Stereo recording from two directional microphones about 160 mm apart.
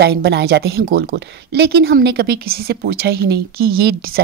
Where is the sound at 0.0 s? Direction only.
90° right.